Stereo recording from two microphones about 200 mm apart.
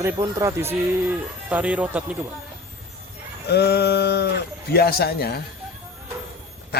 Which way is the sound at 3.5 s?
55° left (ahead or behind).